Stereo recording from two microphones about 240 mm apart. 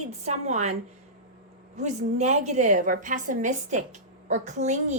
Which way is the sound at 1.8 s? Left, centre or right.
Right.